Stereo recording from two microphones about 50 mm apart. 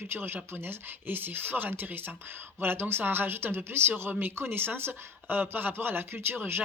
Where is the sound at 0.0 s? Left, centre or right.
Right.